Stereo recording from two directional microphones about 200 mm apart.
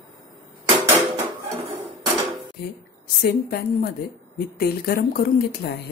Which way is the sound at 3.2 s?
50° left (ahead or behind).